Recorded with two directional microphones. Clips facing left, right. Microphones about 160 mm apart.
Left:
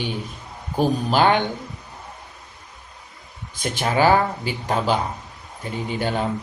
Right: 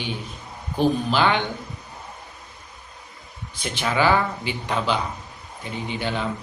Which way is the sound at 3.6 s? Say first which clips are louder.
Left 3 dB; 45° left (ahead or behind).